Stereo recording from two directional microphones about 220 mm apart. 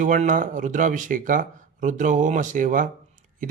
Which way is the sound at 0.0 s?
35° right (ahead or behind).